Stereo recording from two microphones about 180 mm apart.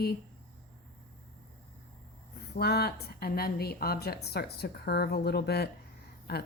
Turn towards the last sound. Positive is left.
turn(degrees=65)  # may be behind; listen again after turning